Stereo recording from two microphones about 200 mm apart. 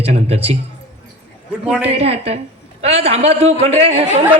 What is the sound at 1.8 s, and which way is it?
A woman's voice, 30° right (ahead or behind).